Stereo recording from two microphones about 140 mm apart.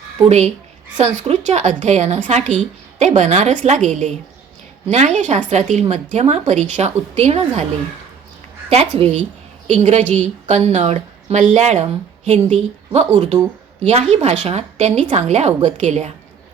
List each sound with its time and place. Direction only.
0.3 s a woman's voice: 50° right (ahead or behind)
8.7 s a woman's voice: 45° right (ahead or behind)